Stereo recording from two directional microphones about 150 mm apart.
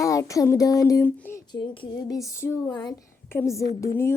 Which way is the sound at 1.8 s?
25° left (ahead or behind).